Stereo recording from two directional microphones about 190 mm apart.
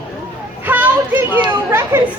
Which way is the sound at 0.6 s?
10° right (ahead or behind).